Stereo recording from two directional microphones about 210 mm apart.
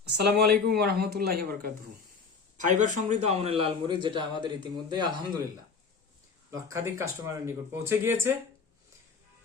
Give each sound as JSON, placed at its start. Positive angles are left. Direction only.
{"t": 0.1, "sound": "a man's voice", "side_deg": -50}
{"t": 6.5, "sound": "speech", "side_deg": -15}